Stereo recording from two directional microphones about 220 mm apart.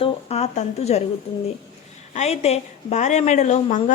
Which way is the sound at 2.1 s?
30° left (ahead or behind).